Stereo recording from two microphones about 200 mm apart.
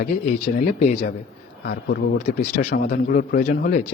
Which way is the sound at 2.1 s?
35° left (ahead or behind).